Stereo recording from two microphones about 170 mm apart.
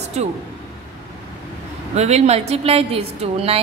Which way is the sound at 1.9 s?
40° right (ahead or behind).